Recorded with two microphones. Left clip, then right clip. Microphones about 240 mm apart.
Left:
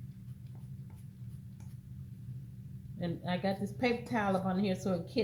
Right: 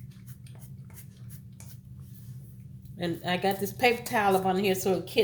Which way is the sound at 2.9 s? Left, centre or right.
Right.